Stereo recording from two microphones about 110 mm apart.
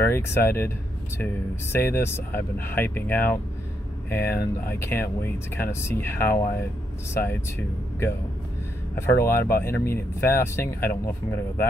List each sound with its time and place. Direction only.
0.0 s speech: 20° left (ahead or behind)
8.9 s speech: 25° left (ahead or behind)